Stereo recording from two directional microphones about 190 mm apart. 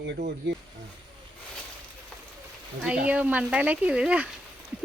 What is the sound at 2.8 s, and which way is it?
Speech, 5° right (ahead or behind).